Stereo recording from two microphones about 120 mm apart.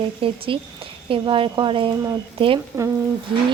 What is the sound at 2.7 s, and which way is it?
Speech, 20° right (ahead or behind).